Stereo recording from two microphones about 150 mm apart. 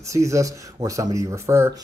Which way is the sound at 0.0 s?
20° right (ahead or behind).